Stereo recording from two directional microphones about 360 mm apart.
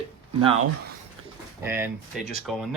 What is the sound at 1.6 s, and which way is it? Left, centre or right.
Speech, centre.